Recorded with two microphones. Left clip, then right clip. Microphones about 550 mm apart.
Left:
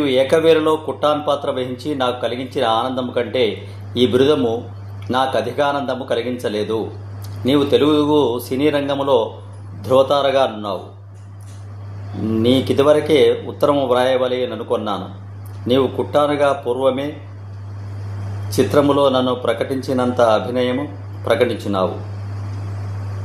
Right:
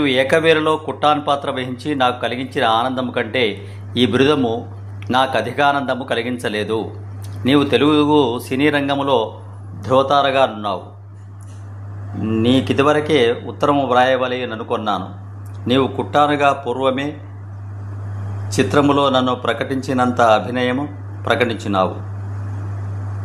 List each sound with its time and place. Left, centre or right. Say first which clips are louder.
0.0 s a man's voice: even; left
12.4 s a man's voice: left 1 dB; left
18.5 s a man's voice: even; left